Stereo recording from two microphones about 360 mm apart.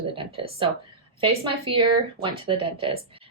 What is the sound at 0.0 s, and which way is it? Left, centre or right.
A woman's voice, centre.